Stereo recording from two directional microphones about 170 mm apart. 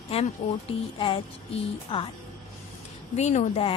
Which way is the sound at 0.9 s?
30° left (ahead or behind).